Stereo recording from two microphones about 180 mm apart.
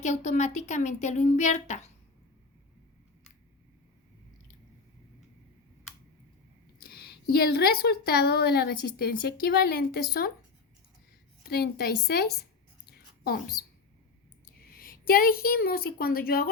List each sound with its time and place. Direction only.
0.0 s speech: 40° left (ahead or behind)
6.8 s a woman's voice: 60° left (ahead or behind)
11.4 s a woman's voice: 60° left (ahead or behind)